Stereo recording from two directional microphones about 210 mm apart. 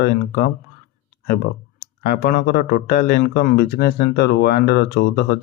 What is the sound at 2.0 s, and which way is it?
Speech, 45° left (ahead or behind).